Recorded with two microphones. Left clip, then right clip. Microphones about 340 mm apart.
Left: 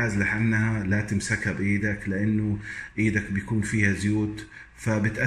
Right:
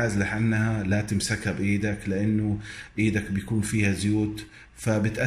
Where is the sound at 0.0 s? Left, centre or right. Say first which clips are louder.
Left 1 dB; centre.